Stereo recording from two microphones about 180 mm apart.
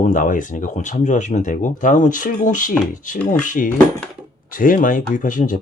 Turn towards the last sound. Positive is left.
turn(degrees=45)  # may be behind; listen again after turning